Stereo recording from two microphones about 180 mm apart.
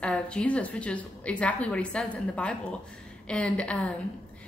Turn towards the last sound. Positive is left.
turn(degrees=5)  # may be behind; listen again after turning